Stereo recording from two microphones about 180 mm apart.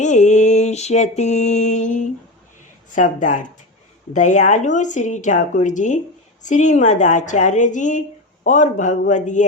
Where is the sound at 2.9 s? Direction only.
45° left (ahead or behind).